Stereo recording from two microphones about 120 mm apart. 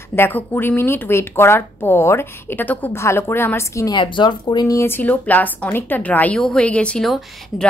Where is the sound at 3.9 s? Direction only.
40° left (ahead or behind).